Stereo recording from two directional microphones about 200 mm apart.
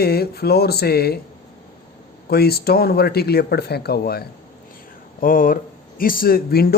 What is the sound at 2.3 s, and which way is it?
Speech, 50° left (ahead or behind).